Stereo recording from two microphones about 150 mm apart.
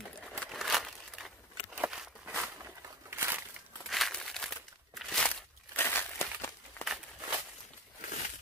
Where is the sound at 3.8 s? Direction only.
Centre (ahead or behind).